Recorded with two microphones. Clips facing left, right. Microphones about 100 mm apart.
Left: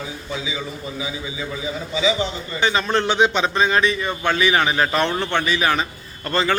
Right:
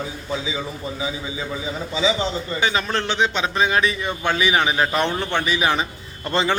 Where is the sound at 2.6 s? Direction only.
Centre (ahead or behind).